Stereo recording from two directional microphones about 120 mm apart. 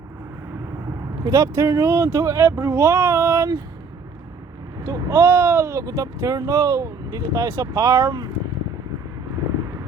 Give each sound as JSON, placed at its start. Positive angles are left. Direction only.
{"t": 1.2, "sound": "speech", "side_deg": -30}
{"t": 4.8, "sound": "speech", "side_deg": -30}